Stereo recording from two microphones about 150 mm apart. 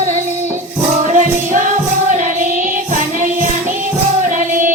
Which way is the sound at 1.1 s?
60° right (ahead or behind).